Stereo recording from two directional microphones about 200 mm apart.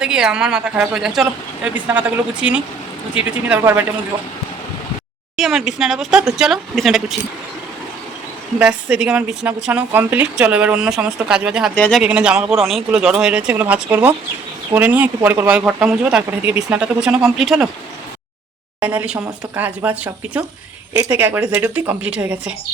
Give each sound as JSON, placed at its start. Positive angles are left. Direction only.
{"t": 0.0, "sound": "speech", "side_deg": -5}
{"t": 5.4, "sound": "speech", "side_deg": 0}
{"t": 8.5, "sound": "speech", "side_deg": -5}
{"t": 18.8, "sound": "speech", "side_deg": -5}